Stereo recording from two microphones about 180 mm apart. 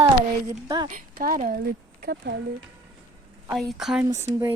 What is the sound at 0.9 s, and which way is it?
Speech, 45° right (ahead or behind).